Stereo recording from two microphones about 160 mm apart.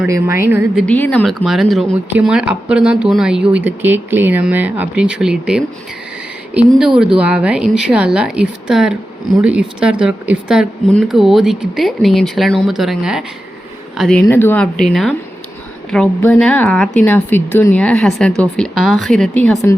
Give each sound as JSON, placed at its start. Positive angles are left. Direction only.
{"t": 0.1, "sound": "speech", "side_deg": -15}
{"t": 0.8, "sound": "speech", "side_deg": 10}
{"t": 6.7, "sound": "speech", "side_deg": -5}
{"t": 14.2, "sound": "speech", "side_deg": 15}